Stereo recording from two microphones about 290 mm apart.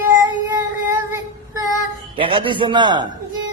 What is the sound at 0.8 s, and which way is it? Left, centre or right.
Child singing, centre.